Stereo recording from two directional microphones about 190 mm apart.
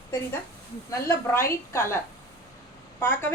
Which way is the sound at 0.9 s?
15° left (ahead or behind).